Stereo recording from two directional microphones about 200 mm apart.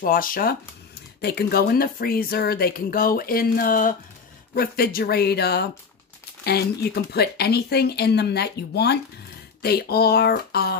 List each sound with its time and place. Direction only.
0.0 s speech: 45° left (ahead or behind)